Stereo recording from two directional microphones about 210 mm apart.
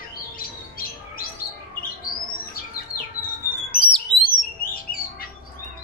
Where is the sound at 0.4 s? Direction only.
45° left (ahead or behind).